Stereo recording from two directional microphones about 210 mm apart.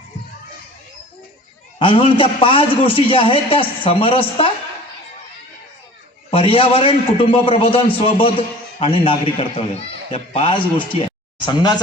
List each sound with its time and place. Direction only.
1.8 s a man's voice: 25° left (ahead or behind)
6.3 s a man's voice: 25° left (ahead or behind)